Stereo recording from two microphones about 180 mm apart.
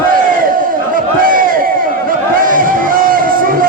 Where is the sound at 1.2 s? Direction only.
50° right (ahead or behind).